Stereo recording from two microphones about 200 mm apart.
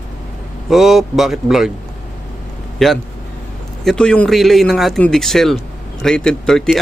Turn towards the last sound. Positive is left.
turn(degrees=0)  # may be behind; listen again after turning